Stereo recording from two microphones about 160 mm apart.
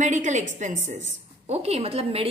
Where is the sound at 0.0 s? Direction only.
50° right (ahead or behind).